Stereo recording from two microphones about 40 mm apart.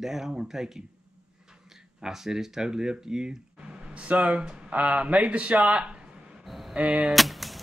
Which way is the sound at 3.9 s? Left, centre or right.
Right.